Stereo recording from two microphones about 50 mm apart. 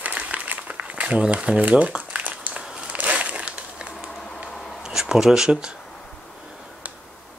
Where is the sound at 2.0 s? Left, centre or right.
Right.